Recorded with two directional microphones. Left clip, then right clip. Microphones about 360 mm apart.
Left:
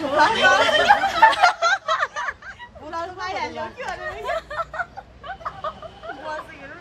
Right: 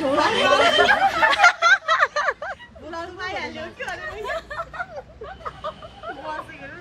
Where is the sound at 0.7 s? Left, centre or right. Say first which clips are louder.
Even; centre.